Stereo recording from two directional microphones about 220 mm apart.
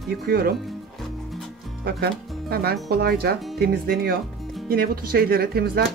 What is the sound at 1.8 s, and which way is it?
Speech, 45° right (ahead or behind).